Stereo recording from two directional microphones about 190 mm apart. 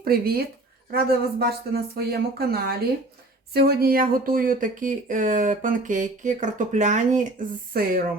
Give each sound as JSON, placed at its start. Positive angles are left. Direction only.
{"t": 0.0, "sound": "speech", "side_deg": -55}
{"t": 7.7, "sound": "speech", "side_deg": -50}